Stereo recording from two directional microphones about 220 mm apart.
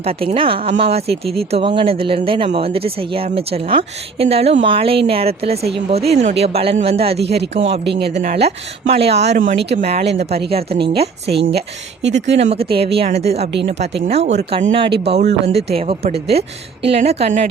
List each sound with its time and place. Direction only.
0.0 s speech: 25° right (ahead or behind)
11.3 s speech: 45° right (ahead or behind)
12.4 s speech: 25° right (ahead or behind)